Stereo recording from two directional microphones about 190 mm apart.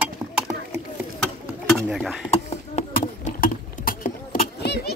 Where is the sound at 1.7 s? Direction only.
Centre (ahead or behind).